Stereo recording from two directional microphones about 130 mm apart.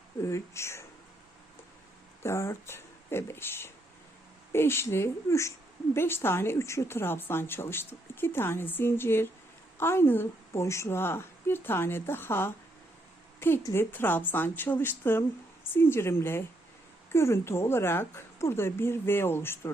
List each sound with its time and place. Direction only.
0.3 s speech: 20° left (ahead or behind)
2.2 s a woman's voice: 20° left (ahead or behind)